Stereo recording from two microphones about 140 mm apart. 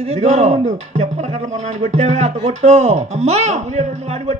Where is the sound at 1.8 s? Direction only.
55° right (ahead or behind).